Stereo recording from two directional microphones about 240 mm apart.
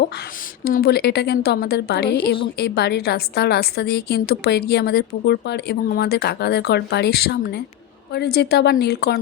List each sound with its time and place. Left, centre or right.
0.6 s a woman's voice: left